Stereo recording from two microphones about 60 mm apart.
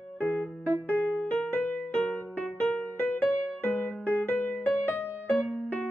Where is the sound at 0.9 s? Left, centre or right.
Left.